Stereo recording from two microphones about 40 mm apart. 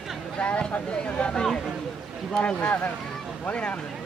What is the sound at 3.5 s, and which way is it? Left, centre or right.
Speech, left.